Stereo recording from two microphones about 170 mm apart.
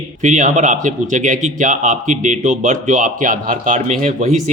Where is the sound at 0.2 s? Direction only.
45° right (ahead or behind).